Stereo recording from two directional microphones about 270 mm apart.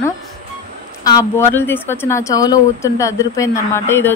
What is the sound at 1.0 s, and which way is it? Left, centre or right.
A woman's voice, centre.